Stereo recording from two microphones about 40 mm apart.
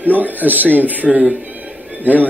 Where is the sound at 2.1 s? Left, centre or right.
Right.